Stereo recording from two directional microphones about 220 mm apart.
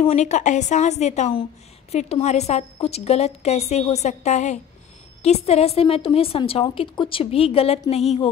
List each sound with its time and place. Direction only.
0.0 s a woman's voice: 30° left (ahead or behind)